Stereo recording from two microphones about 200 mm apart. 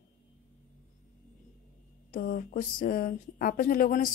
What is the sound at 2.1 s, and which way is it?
A woman's voice, 45° left (ahead or behind).